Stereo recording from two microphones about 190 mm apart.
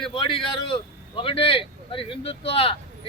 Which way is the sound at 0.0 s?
25° left (ahead or behind).